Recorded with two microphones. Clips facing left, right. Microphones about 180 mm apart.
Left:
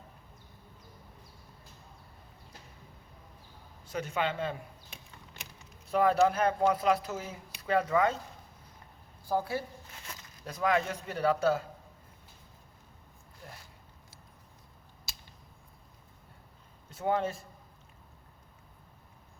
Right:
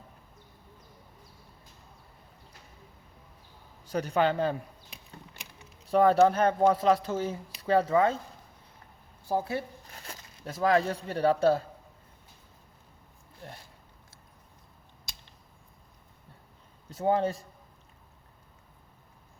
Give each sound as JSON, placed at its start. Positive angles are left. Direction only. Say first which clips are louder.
{"t": 4.0, "sound": "speech", "louder": "right 7 dB", "side_deg": -35}
{"t": 5.9, "sound": "speech", "louder": "right 4 dB", "side_deg": -30}
{"t": 9.3, "sound": "speech", "louder": "right 1 dB", "side_deg": -25}
{"t": 16.9, "sound": "speech", "louder": "right 4 dB", "side_deg": -35}